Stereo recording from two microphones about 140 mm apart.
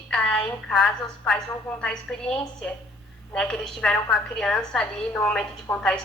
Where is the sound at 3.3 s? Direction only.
5° left (ahead or behind).